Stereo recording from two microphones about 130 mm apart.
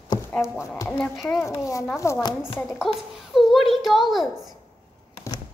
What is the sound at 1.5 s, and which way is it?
Speech, 25° left (ahead or behind).